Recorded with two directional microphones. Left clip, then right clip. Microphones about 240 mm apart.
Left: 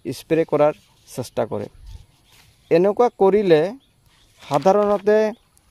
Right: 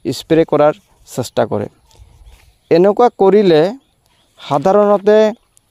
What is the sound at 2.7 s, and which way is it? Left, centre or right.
Speech, right.